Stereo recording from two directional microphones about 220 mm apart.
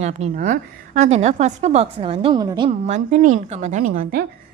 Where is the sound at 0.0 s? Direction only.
30° right (ahead or behind).